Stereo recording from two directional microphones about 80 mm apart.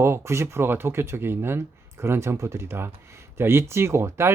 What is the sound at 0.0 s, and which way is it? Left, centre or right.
Speech, right.